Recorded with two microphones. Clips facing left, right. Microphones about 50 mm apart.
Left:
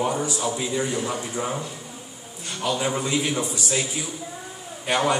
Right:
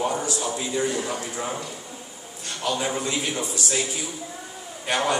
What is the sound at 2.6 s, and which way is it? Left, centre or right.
A man's voice, centre.